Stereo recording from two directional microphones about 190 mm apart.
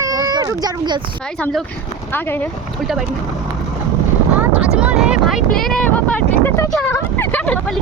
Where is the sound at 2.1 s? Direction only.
10° left (ahead or behind).